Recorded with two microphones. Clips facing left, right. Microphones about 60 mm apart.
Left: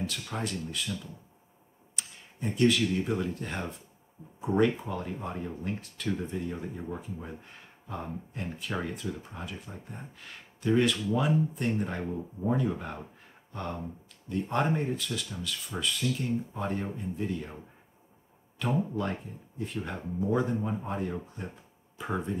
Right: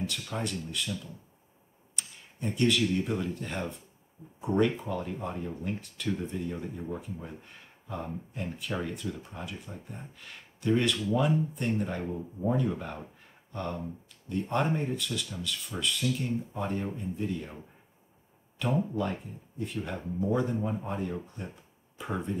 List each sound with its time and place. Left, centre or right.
0.0 s speech: centre
2.0 s speech: centre
18.9 s speech: centre